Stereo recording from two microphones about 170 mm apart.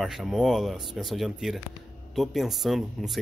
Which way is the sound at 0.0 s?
Centre (ahead or behind).